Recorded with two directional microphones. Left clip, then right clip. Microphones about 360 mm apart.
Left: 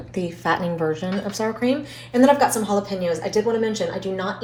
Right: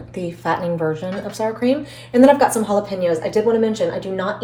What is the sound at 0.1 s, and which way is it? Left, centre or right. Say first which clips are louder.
A woman's voice: right 1 dB; left.